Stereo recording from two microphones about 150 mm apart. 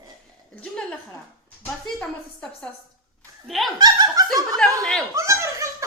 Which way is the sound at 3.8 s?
25° right (ahead or behind).